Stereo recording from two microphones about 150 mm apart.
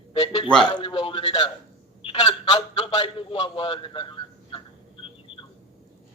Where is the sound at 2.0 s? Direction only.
45° left (ahead or behind).